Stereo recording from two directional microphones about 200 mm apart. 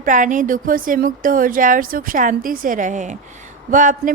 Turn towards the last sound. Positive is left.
turn(degrees=-40)  # may be behind; listen again after turning